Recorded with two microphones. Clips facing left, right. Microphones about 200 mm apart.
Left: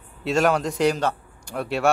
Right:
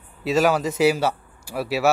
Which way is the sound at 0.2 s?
Centre (ahead or behind).